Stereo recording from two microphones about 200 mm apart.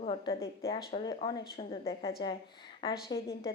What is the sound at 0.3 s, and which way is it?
Speech, 15° left (ahead or behind).